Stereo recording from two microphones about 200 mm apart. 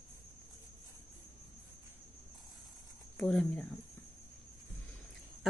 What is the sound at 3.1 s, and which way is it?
Speech, 5° left (ahead or behind).